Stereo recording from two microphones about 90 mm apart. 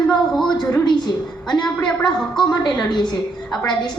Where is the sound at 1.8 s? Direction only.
10° left (ahead or behind).